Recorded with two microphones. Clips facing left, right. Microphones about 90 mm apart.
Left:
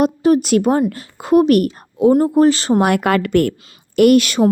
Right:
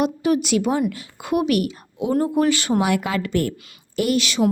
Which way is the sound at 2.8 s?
55° left (ahead or behind).